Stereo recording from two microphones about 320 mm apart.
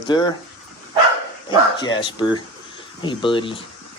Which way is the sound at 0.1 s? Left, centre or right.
Centre.